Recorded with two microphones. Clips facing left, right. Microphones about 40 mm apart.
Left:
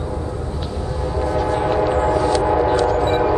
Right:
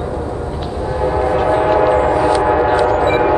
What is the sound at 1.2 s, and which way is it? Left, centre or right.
Train, right.